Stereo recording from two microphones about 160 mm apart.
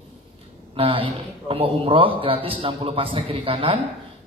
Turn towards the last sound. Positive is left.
turn(degrees=-35)  # may be behind; listen again after turning